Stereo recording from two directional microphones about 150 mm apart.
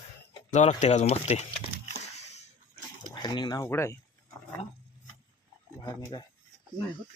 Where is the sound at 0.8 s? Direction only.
50° left (ahead or behind).